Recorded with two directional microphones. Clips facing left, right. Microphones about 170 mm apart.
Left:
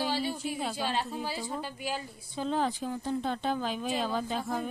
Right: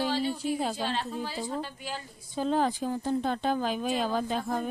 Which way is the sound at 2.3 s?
45° right (ahead or behind).